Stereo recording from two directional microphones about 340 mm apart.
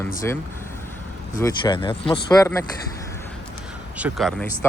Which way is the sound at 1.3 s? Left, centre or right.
Centre.